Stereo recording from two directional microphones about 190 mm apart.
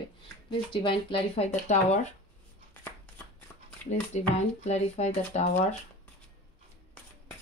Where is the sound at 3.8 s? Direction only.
35° left (ahead or behind).